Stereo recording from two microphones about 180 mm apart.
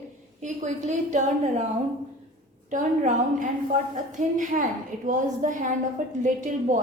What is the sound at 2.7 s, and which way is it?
A woman's voice, 45° right (ahead or behind).